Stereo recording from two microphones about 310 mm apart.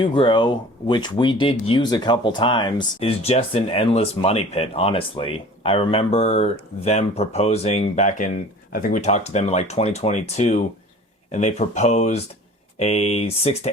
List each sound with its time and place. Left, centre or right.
0.0 s speech: centre